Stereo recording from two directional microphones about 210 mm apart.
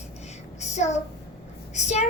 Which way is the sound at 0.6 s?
35° left (ahead or behind).